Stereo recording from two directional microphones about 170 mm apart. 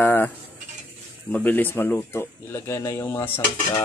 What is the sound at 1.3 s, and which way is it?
Speech, 10° left (ahead or behind).